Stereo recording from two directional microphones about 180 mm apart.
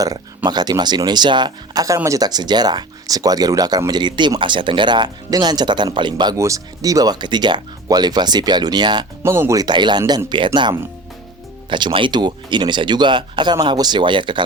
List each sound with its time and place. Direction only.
0.0 s speech: 20° right (ahead or behind)